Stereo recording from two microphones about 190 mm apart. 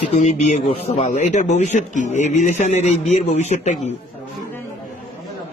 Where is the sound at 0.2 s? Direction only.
35° left (ahead or behind).